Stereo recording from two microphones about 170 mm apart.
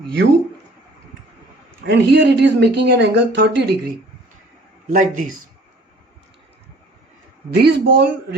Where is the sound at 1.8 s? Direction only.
85° right.